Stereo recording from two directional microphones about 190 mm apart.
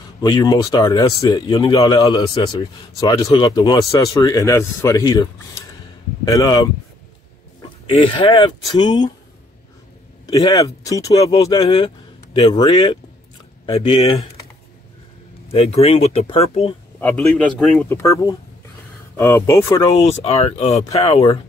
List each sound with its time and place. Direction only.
0.2 s speech: 20° left (ahead or behind)
8.0 s speech: 25° left (ahead or behind)
10.2 s speech: 20° left (ahead or behind)
15.5 s speech: 30° left (ahead or behind)
17.0 s a man's voice: 5° left (ahead or behind)
17.8 s speech: 15° left (ahead or behind)
20.0 s speech: 30° left (ahead or behind)